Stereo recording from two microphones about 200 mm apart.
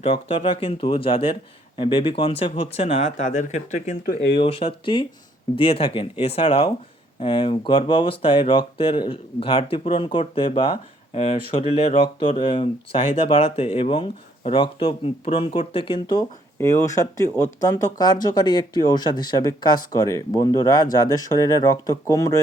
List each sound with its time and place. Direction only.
0.0 s speech: 30° left (ahead or behind); by 4.4 s 50° left (ahead or behind)
4.4 s speech: 30° left (ahead or behind)